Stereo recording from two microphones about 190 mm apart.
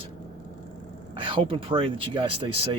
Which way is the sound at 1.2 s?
25° right (ahead or behind).